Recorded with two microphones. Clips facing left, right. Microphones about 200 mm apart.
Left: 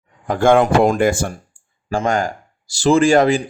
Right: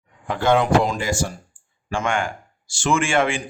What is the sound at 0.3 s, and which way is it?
Speech, 50° left (ahead or behind).